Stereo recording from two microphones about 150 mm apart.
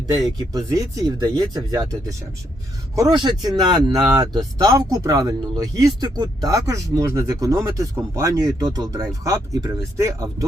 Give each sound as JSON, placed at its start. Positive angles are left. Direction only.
{"t": 0.3, "sound": "speech", "side_deg": -25}